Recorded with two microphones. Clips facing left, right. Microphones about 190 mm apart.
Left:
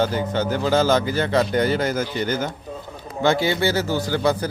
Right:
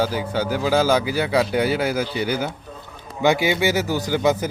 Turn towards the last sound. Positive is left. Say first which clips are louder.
# right 1 dB
turn(degrees=-20)  # may be behind; listen again after turning